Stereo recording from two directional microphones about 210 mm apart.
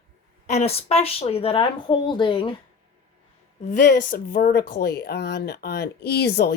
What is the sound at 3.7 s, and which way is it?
Speech, 40° left (ahead or behind).